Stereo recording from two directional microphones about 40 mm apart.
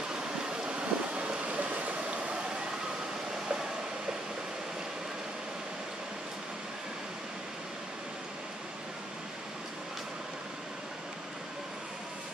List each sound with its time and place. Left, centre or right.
0.1 s vehicle: centre